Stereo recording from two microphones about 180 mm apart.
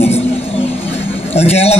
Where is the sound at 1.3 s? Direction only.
35° left (ahead or behind).